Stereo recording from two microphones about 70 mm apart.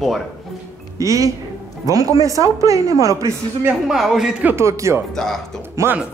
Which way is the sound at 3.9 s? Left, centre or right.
Centre.